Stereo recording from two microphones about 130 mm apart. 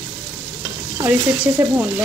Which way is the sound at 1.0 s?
15° right (ahead or behind).